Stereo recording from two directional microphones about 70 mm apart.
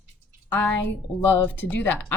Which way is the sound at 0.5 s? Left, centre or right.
Left.